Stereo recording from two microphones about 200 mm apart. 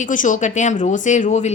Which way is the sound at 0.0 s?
40° left (ahead or behind).